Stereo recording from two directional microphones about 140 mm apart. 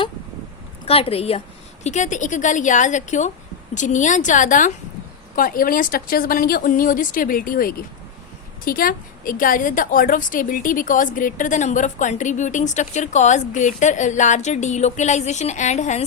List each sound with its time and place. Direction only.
0.9 s a woman's voice: 45° left (ahead or behind)
1.8 s a woman's voice: 60° left (ahead or behind)
5.4 s a woman's voice: 90° left; by 16.0 s 55° left (ahead or behind)